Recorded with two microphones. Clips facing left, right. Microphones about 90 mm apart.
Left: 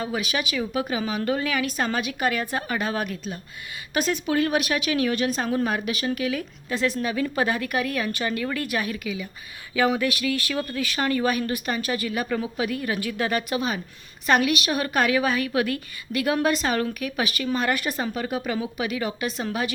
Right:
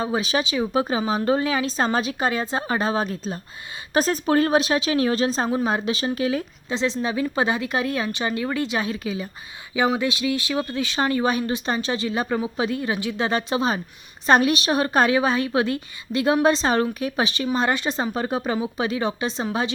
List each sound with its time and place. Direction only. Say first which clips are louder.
0.0 s a woman's voice: right 4 dB; 30° right (ahead or behind)
9.7 s a woman's voice: right 1 dB; 20° right (ahead or behind)